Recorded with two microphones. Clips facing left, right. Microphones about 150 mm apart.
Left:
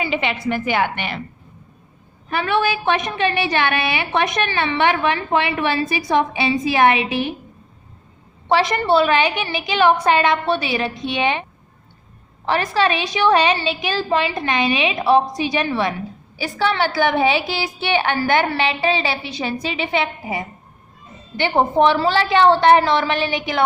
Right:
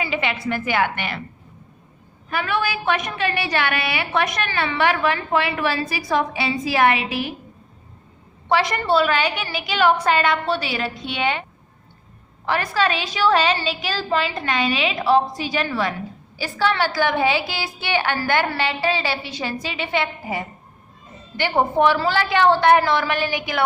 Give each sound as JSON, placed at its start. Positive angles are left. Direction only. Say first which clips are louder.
{"t": 0.0, "sound": "a woman's voice", "louder": "left 2 dB", "side_deg": 20}
{"t": 2.3, "sound": "a woman's voice", "louder": "left 4 dB", "side_deg": 25}
{"t": 8.4, "sound": "a woman's voice", "louder": "left 3 dB", "side_deg": 25}
{"t": 12.5, "sound": "a woman's voice", "louder": "left 3 dB", "side_deg": 25}
{"t": 17.3, "sound": "a woman's voice", "louder": "left 3 dB", "side_deg": 20}
{"t": 21.3, "sound": "a woman's voice", "louder": "left 2 dB", "side_deg": 20}